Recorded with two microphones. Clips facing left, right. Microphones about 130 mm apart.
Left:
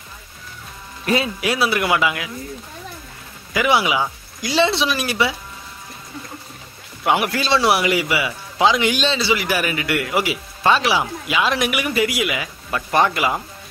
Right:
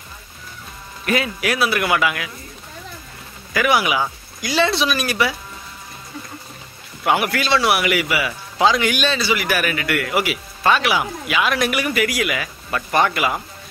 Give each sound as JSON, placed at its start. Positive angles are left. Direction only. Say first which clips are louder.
{"t": 1.0, "sound": "speech", "louder": "left 1 dB", "side_deg": 25}
{"t": 3.5, "sound": "speech", "louder": "even", "side_deg": 20}
{"t": 7.1, "sound": "speech", "louder": "even", "side_deg": 20}